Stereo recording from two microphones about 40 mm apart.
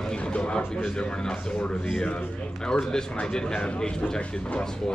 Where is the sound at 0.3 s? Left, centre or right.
Left.